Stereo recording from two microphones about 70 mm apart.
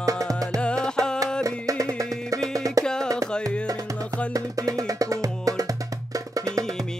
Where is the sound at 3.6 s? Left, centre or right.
Right.